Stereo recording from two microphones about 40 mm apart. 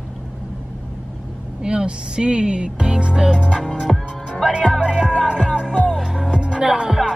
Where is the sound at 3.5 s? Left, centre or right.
Centre.